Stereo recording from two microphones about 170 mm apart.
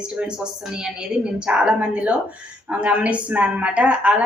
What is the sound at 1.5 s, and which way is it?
A woman's voice, 5° right (ahead or behind).